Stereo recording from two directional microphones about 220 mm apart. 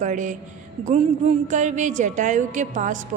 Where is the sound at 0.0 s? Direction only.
35° right (ahead or behind).